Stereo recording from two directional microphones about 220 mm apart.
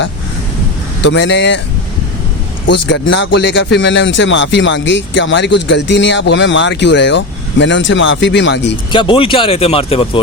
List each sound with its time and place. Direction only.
1.0 s speech: 55° left (ahead or behind)
2.6 s speech: 55° left (ahead or behind)
8.9 s speech: 20° left (ahead or behind)